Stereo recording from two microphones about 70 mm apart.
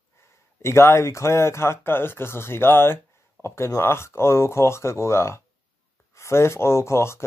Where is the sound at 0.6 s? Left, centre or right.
Left.